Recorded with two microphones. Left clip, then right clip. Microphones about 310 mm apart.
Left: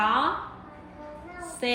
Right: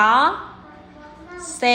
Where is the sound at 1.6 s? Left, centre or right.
Centre.